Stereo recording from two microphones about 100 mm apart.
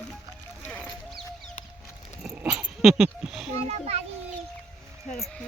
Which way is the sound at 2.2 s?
10° right (ahead or behind).